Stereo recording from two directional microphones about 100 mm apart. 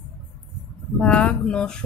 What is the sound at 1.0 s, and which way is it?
Speech, 10° left (ahead or behind).